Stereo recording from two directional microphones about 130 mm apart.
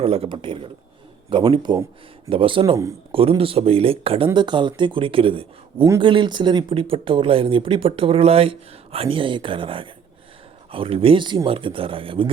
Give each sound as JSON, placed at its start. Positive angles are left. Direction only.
{"t": 0.0, "sound": "a man's voice", "side_deg": -45}